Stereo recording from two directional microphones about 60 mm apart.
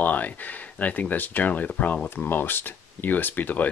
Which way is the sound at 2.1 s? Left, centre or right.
Left.